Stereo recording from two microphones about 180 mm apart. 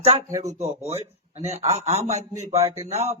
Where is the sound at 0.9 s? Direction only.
35° right (ahead or behind).